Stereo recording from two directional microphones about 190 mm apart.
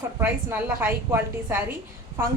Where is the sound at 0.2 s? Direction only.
10° right (ahead or behind).